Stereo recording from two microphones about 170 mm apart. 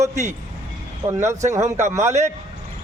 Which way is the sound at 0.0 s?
15° right (ahead or behind).